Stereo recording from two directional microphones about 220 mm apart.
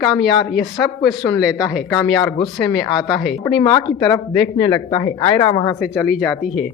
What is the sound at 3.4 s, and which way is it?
Speech, 20° left (ahead or behind).